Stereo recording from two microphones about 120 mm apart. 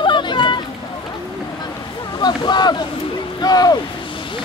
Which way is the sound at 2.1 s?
35° left (ahead or behind).